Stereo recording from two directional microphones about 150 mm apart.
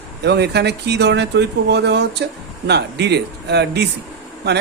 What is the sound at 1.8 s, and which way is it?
Speech, 90° right.